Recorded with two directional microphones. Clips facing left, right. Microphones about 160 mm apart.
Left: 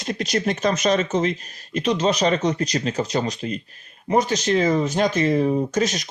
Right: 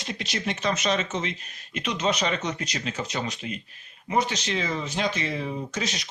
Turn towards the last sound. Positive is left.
turn(degrees=45)  # may be behind; listen again after turning